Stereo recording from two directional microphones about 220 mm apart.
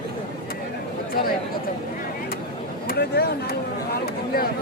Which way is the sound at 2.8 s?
45° left (ahead or behind).